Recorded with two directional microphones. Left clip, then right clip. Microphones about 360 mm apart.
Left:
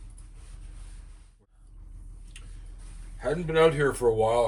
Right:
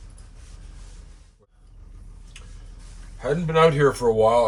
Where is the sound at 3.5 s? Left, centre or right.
Centre.